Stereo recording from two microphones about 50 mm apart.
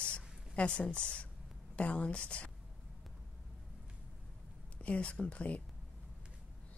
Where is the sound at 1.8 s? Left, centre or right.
Left.